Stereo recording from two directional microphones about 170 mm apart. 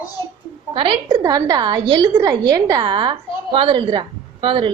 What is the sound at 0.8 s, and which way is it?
A woman's voice, 25° right (ahead or behind).